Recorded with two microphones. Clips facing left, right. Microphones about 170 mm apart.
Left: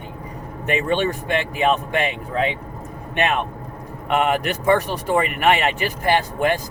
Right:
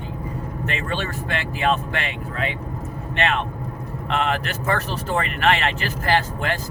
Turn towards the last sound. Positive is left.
turn(degrees=15)  # may be behind; listen again after turning